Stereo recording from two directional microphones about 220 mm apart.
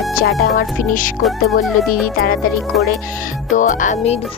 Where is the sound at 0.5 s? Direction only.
40° left (ahead or behind).